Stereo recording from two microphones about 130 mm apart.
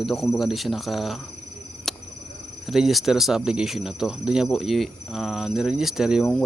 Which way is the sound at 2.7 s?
Centre (ahead or behind).